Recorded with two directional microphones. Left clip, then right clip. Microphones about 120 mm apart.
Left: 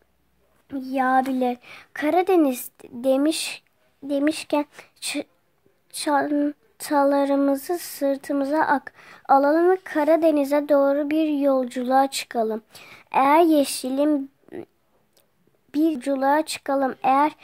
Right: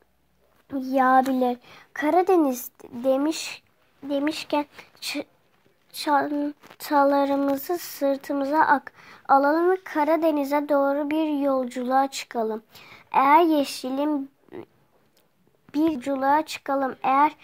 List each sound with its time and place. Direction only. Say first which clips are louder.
0.7 s speech: right 2 dB; centre (ahead or behind)
1.4 s a woman's voice: even; 15° left (ahead or behind)
3.3 s speech: left 4 dB; 40° left (ahead or behind)
9.9 s speech: left 4 dB; 55° left (ahead or behind)
13.5 s speech: left 3 dB; 55° left (ahead or behind)
15.7 s speech: left 2 dB; 45° left (ahead or behind)